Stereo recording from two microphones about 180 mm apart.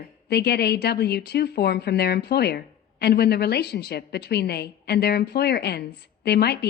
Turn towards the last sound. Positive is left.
turn(degrees=65)  # may be behind; listen again after turning